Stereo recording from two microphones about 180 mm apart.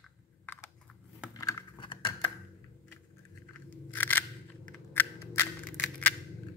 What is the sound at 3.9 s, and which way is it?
Scissors, 10° left (ahead or behind).